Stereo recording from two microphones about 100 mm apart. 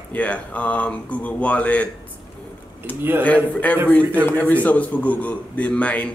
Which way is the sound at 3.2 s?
15° left (ahead or behind).